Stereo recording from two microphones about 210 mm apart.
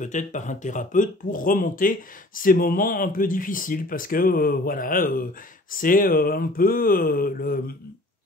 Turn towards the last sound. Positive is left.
turn(degrees=45)  # may be behind; listen again after turning